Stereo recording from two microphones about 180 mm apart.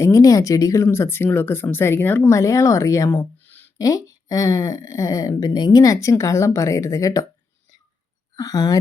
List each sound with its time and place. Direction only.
0.0 s speech: 20° left (ahead or behind)
8.4 s speech: 20° left (ahead or behind)